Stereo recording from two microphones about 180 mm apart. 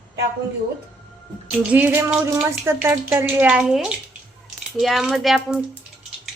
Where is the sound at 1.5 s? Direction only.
10° right (ahead or behind).